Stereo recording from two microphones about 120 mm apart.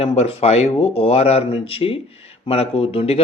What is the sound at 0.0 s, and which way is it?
Speech, 60° left (ahead or behind).